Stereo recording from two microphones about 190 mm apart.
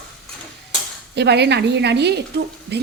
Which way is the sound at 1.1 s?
60° right (ahead or behind).